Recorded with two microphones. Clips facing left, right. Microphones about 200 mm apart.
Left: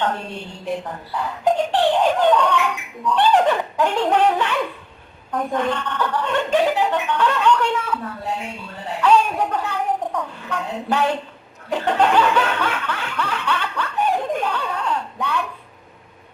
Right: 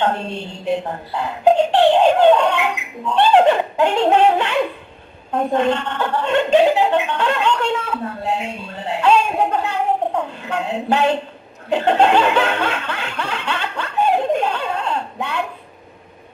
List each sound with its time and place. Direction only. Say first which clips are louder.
0.0 s speech: right 4 dB; 25° right (ahead or behind)
11.9 s snicker: right 2 dB; 25° right (ahead or behind)